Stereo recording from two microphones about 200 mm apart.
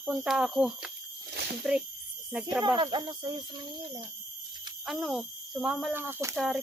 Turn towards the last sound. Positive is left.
turn(degrees=0)  # may be behind; listen again after turning